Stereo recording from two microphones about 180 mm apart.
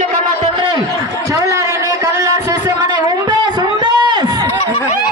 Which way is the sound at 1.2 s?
15° right (ahead or behind).